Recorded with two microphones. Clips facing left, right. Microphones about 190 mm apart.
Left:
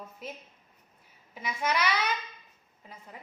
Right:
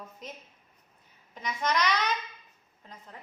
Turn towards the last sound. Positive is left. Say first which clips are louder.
# left 1 dB
turn(degrees=10)  # may be behind; listen again after turning